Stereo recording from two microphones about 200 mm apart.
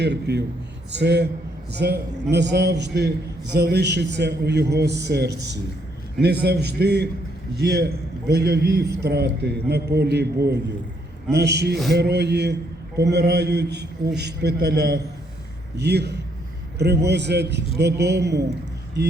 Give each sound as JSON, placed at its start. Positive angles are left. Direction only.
{"t": 0.0, "sound": "a man's voice", "side_deg": -60}
{"t": 18.0, "sound": "a man's voice", "side_deg": -15}